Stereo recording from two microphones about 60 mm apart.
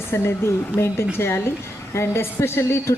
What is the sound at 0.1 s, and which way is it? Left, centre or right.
A woman's voice, left.